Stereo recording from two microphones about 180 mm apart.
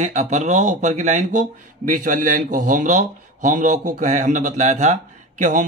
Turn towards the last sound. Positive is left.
turn(degrees=-45)  # may be behind; listen again after turning